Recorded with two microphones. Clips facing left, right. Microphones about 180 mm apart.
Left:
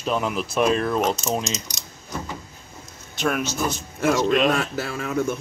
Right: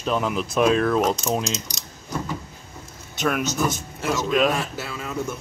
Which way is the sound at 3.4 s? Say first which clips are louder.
Right 2 dB; 45° right (ahead or behind).